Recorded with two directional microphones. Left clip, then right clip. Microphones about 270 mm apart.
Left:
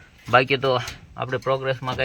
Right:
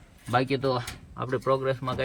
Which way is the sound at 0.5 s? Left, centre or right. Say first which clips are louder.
Left 6 dB; centre.